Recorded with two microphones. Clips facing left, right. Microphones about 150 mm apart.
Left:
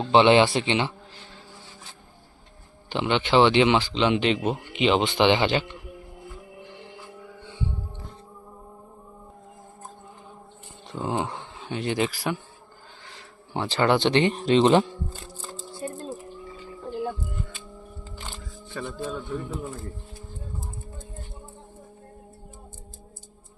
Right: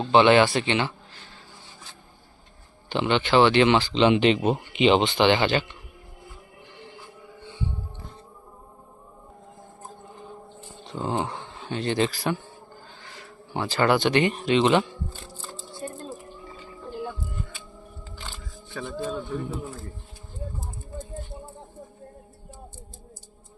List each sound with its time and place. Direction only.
0.1 s speech: 25° left (ahead or behind)
2.9 s speech: 15° left (ahead or behind)
4.0 s speech: centre (ahead or behind)
5.0 s speech: 15° left (ahead or behind)
10.9 s speech: 5° left (ahead or behind)
13.7 s speech: 25° left (ahead or behind)
18.7 s speech: centre (ahead or behind)